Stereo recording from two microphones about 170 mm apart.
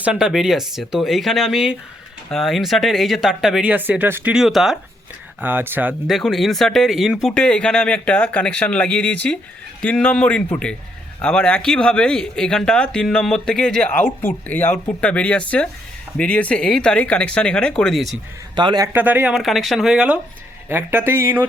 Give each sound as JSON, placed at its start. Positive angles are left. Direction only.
{"t": 0.0, "sound": "speech", "side_deg": -5}
{"t": 6.1, "sound": "speech", "side_deg": 0}
{"t": 18.5, "sound": "a man's voice", "side_deg": -25}
{"t": 18.9, "sound": "speech", "side_deg": -10}